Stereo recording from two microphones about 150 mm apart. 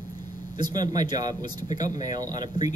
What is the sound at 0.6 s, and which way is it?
Speech, 30° right (ahead or behind).